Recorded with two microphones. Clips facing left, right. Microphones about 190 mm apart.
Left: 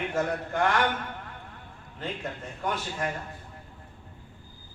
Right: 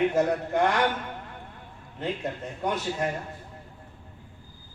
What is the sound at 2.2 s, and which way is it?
Speech, 25° right (ahead or behind).